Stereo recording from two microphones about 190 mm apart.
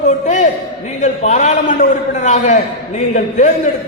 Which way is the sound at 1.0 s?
35° left (ahead or behind).